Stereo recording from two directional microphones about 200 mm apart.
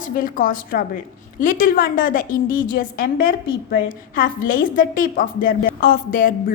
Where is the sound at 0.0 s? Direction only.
45° left (ahead or behind).